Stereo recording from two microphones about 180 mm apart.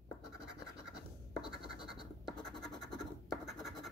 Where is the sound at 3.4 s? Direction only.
Centre (ahead or behind).